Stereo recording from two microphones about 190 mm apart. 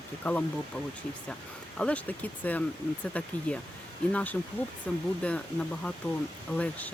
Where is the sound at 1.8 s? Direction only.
5° left (ahead or behind).